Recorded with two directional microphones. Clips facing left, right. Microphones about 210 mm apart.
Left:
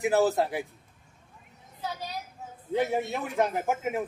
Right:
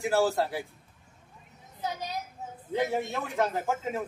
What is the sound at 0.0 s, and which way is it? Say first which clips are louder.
Speech: left 2 dB; 20° left (ahead or behind).